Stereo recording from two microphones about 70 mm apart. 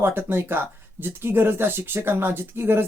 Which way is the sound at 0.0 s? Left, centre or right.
Right.